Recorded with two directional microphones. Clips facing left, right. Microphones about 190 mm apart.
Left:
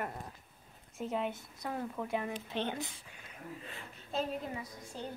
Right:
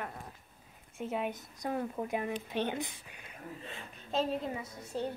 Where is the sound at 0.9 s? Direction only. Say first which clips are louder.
Even; 5° right (ahead or behind); by 4.9 s 25° right (ahead or behind).